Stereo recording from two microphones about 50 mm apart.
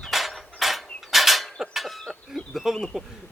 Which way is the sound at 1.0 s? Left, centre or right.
Centre.